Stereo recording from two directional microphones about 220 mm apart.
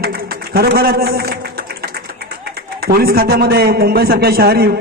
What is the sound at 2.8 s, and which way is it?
A man's voice, 45° right (ahead or behind).